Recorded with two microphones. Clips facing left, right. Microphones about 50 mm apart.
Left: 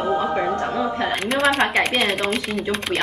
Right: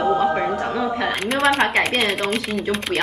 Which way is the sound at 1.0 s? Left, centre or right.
Centre.